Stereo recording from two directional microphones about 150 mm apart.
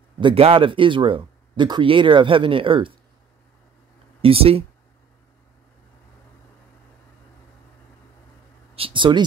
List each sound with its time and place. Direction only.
0.2 s speech: 40° right (ahead or behind)
4.2 s speech: 40° right (ahead or behind)
8.7 s speech: 35° right (ahead or behind)